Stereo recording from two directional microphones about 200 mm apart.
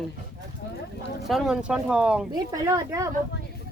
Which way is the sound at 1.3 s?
Centre (ahead or behind).